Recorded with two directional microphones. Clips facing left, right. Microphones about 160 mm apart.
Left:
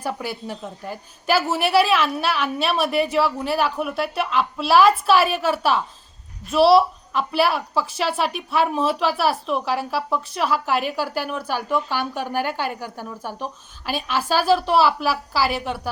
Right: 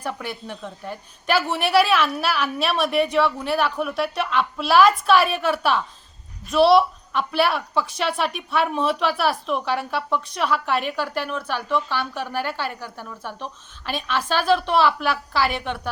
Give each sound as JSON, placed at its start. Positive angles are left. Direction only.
{"t": 0.0, "sound": "a woman's voice", "side_deg": 5}